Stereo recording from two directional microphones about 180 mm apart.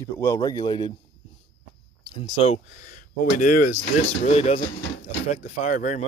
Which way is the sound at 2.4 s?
40° left (ahead or behind).